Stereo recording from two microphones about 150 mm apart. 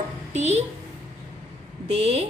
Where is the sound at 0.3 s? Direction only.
50° right (ahead or behind).